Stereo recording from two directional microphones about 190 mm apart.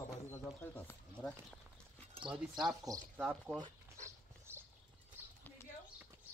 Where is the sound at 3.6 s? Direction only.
15° right (ahead or behind).